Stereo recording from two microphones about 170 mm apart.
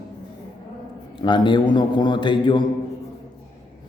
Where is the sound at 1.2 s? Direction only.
25° left (ahead or behind).